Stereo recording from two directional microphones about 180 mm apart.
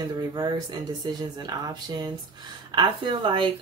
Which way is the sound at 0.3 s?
20° right (ahead or behind).